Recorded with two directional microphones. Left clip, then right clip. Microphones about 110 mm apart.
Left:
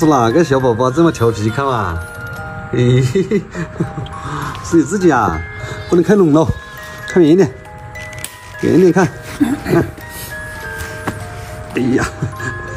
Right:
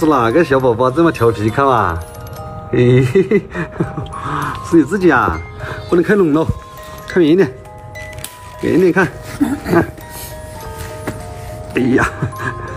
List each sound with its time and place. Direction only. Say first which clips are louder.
0.0 s speech: even; 35° left (ahead or behind)
1.4 s speech: right 4 dB; 10° left (ahead or behind)
4.9 s speech: left 1 dB; 30° left (ahead or behind)
5.3 s speech: even; 10° left (ahead or behind)
6.0 s speech: left 4 dB; 25° left (ahead or behind)
8.5 s speech: left 1 dB; 5° left (ahead or behind)
11.7 s speech: right 2 dB; 10° left (ahead or behind)